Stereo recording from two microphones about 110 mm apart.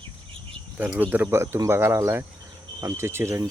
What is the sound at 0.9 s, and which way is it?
Speech, 15° right (ahead or behind).